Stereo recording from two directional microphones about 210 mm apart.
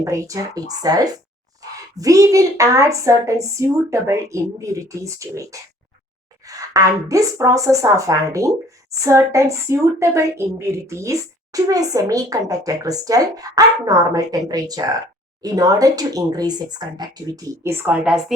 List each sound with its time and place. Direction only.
0.0 s speech: 15° right (ahead or behind)